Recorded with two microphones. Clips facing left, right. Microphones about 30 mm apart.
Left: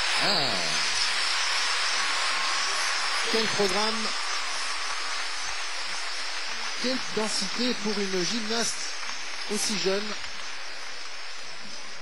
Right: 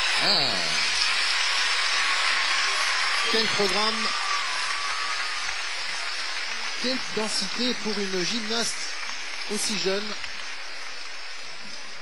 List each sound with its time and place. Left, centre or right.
0.0 s a sound: right
6.8 s speech: right
9.5 s speech: right